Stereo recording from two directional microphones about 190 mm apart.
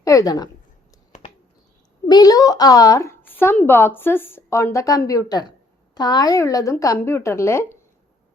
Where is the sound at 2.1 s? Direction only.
20° left (ahead or behind).